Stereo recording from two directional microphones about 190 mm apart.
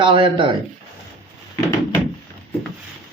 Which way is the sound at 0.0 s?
25° right (ahead or behind).